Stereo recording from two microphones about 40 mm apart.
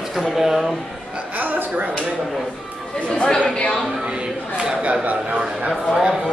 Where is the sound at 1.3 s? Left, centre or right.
Right.